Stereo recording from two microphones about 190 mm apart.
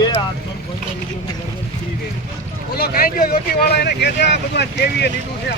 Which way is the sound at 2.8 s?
50° left (ahead or behind).